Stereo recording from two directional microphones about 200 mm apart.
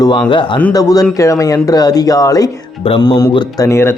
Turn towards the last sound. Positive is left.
turn(degrees=15)  # may be behind; listen again after turning